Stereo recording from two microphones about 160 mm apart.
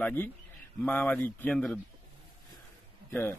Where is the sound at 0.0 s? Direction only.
15° left (ahead or behind).